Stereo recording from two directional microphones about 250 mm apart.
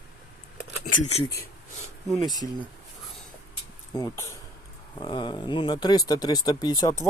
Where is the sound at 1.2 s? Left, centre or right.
Left.